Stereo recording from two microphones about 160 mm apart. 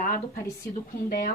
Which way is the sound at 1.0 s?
65° left (ahead or behind).